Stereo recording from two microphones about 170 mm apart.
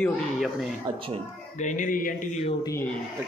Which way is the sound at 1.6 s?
50° left (ahead or behind).